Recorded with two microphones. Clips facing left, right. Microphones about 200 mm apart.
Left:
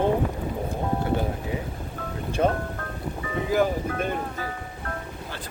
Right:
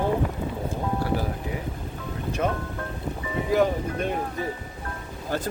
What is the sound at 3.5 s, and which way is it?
Speech, centre (ahead or behind).